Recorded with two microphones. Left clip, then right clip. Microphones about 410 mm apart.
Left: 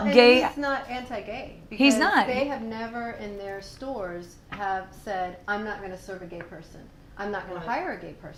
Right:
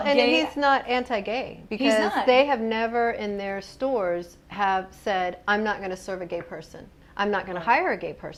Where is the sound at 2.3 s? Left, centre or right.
Right.